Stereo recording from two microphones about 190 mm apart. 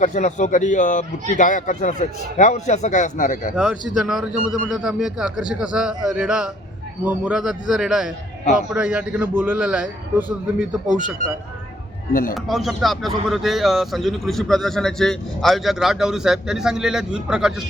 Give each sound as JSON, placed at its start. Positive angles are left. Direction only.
{"t": 0.0, "sound": "speech", "side_deg": 40}
{"t": 3.5, "sound": "a man's voice", "side_deg": -5}
{"t": 12.3, "sound": "a man's voice", "side_deg": 0}